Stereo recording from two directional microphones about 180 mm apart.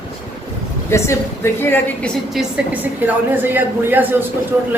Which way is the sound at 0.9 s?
15° left (ahead or behind).